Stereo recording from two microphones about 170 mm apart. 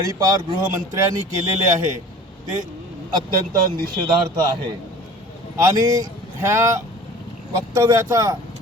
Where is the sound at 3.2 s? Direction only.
60° right (ahead or behind).